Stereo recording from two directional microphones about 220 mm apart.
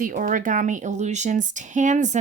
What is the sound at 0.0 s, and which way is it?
Speech, 40° right (ahead or behind).